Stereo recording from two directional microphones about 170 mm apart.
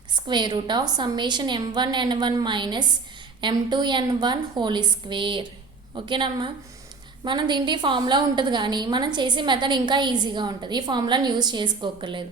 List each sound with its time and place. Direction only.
0.1 s a woman's voice: 25° right (ahead or behind)